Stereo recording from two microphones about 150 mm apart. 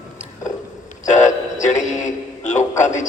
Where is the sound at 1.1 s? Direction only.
55° left (ahead or behind).